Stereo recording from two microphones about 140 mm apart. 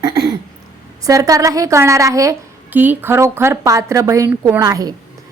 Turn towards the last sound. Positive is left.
turn(degrees=-25)  # may be behind; listen again after turning